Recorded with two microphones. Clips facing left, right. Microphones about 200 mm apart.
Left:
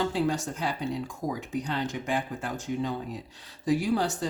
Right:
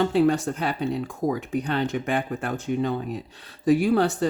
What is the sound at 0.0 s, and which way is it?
Speech, 60° right (ahead or behind).